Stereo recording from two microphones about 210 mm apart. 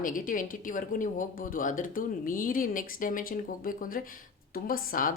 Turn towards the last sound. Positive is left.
turn(degrees=40)  # may be behind; listen again after turning